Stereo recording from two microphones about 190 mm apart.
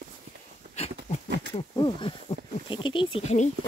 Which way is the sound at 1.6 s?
25° left (ahead or behind).